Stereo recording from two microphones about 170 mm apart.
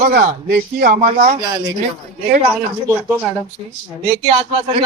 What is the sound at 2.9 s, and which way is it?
Speech, 15° right (ahead or behind).